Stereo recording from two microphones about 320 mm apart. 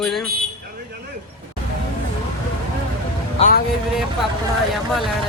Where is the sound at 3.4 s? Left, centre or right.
Left.